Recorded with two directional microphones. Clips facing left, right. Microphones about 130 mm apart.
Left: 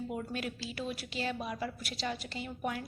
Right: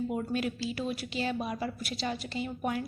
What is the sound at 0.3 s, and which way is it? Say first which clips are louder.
A woman's voice: right 6 dB; 15° right (ahead or behind).